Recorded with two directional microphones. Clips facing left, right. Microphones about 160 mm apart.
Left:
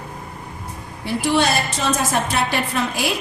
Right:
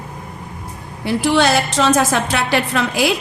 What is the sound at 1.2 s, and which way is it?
A woman's voice, 90° right.